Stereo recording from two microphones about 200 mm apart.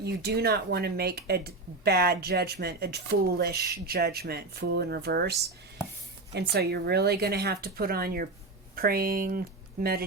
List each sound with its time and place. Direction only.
0.0 s speech: 55° right (ahead or behind)
6.3 s speech: 55° right (ahead or behind)